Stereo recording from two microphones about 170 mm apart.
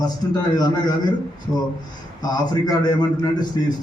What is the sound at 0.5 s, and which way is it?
Speech, 25° left (ahead or behind).